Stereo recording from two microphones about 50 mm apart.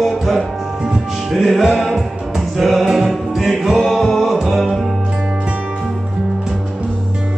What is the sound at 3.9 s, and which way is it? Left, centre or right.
Music, centre.